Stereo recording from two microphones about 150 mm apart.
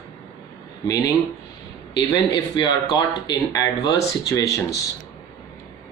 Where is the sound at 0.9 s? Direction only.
25° left (ahead or behind).